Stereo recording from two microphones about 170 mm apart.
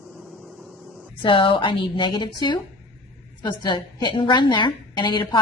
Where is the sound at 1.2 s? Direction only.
30° left (ahead or behind).